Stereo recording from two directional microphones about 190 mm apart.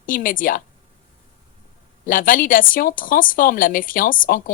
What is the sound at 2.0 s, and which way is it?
A woman's voice, 45° left (ahead or behind).